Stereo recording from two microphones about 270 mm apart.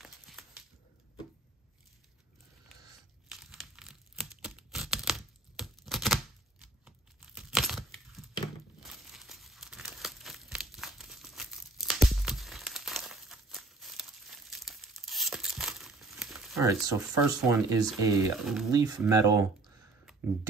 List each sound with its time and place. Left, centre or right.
0.0 s a sound: centre
3.3 s tearing: centre
6.6 s a sound: centre
8.8 s crumpling: centre
16.5 s speech: centre
18.4 s speech: centre
18.7 s speech: centre